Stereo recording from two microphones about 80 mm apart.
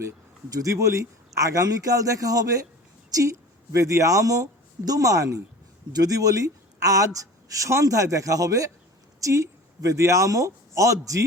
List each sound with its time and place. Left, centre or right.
0.5 s a man's voice: right